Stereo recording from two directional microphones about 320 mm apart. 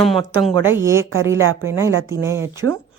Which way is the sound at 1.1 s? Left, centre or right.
Right.